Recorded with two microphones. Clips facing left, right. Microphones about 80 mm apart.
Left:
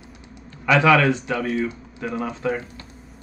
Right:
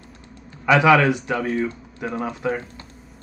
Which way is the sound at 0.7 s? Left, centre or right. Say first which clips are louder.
Right 1 dB; centre.